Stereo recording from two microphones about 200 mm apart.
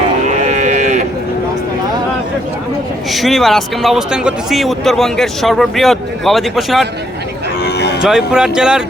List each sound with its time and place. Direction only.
0.3 s livestock: 35° right (ahead or behind)
3.1 s speech: centre (ahead or behind)
7.6 s cattle: 55° left (ahead or behind)
8.0 s speech: 5° right (ahead or behind)